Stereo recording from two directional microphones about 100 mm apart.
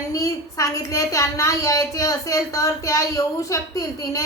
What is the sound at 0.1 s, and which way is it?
A woman's voice, 35° left (ahead or behind).